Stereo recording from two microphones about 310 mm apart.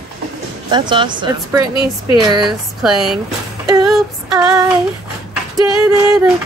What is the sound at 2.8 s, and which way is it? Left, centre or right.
Speech, centre.